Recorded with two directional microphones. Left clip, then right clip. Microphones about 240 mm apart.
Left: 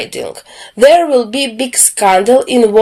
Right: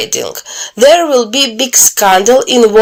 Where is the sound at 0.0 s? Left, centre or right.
Centre.